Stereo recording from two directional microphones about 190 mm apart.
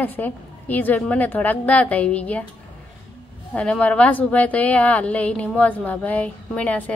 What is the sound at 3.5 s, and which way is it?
A woman's voice, 5° left (ahead or behind).